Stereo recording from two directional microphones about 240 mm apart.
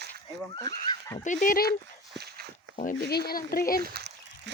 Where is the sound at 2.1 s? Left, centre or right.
Right.